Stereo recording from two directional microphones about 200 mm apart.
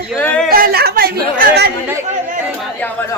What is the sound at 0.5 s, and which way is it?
Chatter, 50° right (ahead or behind).